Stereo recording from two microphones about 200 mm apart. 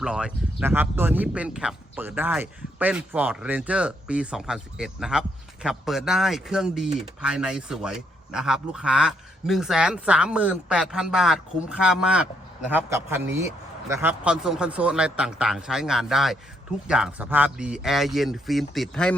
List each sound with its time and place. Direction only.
0.0 s speech: 5° right (ahead or behind)